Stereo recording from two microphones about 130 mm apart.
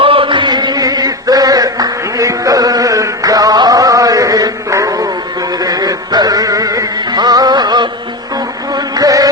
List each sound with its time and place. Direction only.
0.0 s chant: 45° right (ahead or behind); by 5.0 s 25° right (ahead or behind)
5.6 s music: 30° right (ahead or behind)
8.7 s a sound: 30° right (ahead or behind)